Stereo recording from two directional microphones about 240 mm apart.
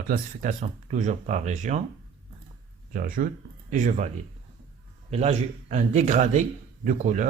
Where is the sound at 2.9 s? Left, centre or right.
Right.